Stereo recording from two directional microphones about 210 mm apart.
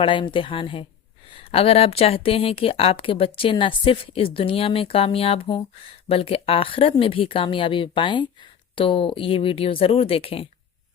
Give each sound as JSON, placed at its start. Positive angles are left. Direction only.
{"t": 0.0, "sound": "speech", "side_deg": 25}